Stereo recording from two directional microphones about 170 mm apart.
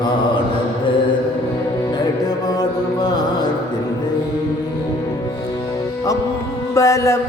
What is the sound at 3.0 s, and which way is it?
Music, 25° left (ahead or behind).